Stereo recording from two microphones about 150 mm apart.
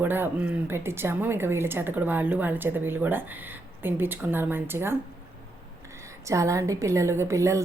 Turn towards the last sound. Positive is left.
turn(degrees=-20)  # may be behind; listen again after turning